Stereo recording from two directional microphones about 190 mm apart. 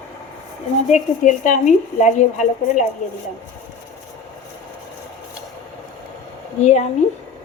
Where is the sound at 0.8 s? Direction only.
40° left (ahead or behind).